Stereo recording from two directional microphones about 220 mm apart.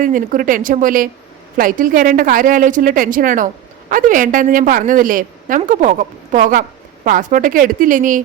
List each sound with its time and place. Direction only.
0.0 s a woman's voice: 35° right (ahead or behind)